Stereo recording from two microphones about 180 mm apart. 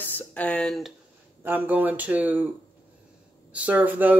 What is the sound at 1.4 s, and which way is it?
Speech, 10° right (ahead or behind).